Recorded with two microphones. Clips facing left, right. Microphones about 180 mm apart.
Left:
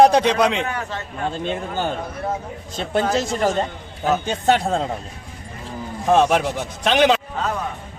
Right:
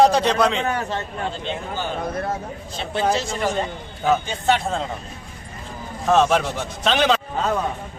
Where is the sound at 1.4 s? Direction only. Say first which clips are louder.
Left 4 dB; 50° left (ahead or behind).